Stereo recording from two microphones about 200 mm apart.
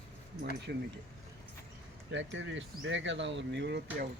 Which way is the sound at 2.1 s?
65° right (ahead or behind).